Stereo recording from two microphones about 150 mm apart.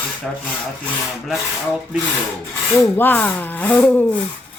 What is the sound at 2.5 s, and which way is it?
Speech, 15° left (ahead or behind).